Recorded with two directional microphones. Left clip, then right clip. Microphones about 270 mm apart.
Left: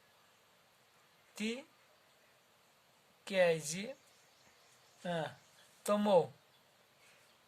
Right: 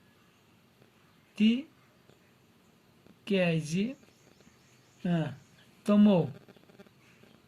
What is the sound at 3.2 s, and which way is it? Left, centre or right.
Speech, left.